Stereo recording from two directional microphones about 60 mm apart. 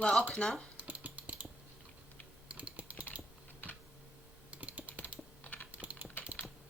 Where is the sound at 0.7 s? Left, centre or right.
Right.